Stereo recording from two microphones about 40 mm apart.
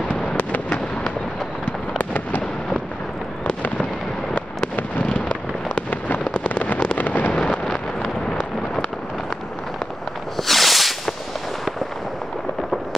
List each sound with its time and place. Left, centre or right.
0.4 s fireworks: left
5.0 s fireworks: left
10.3 s a sound: centre